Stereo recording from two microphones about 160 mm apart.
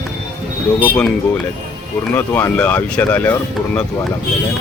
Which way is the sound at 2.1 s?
10° left (ahead or behind).